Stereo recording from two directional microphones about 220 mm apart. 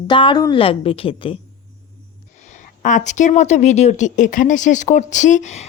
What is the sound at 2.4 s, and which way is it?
Speech, 35° left (ahead or behind).